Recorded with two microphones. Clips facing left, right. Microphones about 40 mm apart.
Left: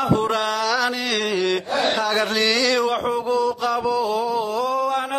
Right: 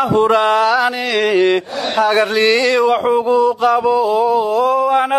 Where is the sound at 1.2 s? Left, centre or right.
Right.